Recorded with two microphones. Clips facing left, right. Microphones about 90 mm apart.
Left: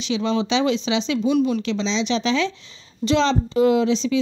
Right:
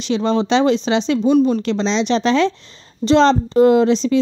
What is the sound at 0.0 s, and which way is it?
A woman's voice, 40° right (ahead or behind).